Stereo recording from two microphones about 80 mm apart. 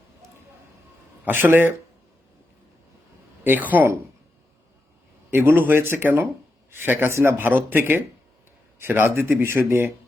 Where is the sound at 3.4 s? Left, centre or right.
Right.